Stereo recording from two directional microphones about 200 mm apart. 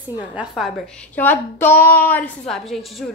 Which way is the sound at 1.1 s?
10° left (ahead or behind).